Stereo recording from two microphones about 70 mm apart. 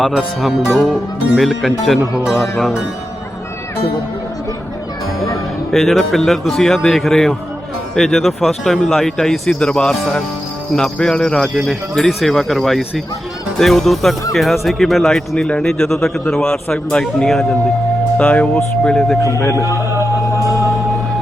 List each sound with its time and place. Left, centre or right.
0.4 s speech: centre
5.7 s speech: centre
19.4 s speech: left
19.9 s music: right